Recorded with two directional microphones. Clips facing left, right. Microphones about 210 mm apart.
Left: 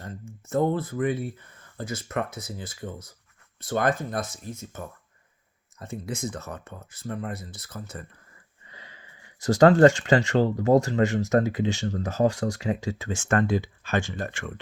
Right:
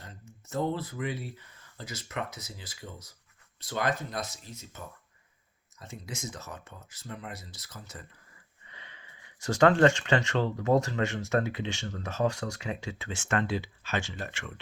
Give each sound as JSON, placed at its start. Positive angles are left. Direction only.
{"t": 0.0, "sound": "speech", "side_deg": 50}
{"t": 5.8, "sound": "speech", "side_deg": 55}
{"t": 8.6, "sound": "speech", "side_deg": 35}